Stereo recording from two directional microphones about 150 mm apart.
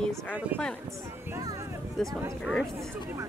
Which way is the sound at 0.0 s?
5° left (ahead or behind).